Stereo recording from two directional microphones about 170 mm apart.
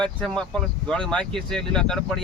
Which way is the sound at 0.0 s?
5° left (ahead or behind).